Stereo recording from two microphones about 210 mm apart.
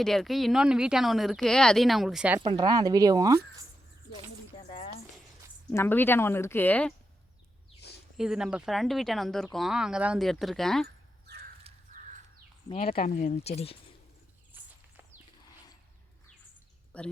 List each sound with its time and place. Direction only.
0.0 s speech: centre (ahead or behind)
2.4 s speech: 20° right (ahead or behind)
5.7 s speech: 10° left (ahead or behind)
7.8 s a sound: 50° left (ahead or behind)
8.1 s speech: 5° right (ahead or behind)
12.8 s speech: 45° left (ahead or behind)
14.5 s walk: 10° right (ahead or behind)
16.9 s speech: 5° left (ahead or behind)